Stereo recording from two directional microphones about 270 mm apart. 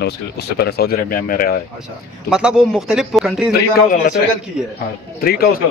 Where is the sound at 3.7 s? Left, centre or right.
Left.